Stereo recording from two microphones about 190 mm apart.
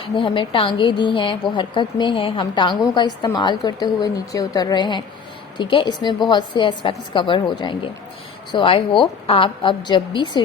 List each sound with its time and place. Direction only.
0.0 s a woman's voice: 25° left (ahead or behind)